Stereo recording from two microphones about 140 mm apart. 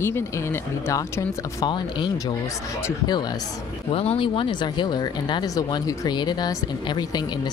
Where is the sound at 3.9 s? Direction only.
45° left (ahead or behind); by 7.2 s 30° left (ahead or behind).